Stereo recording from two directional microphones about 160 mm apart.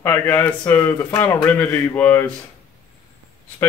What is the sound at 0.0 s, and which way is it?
Speech, 15° left (ahead or behind).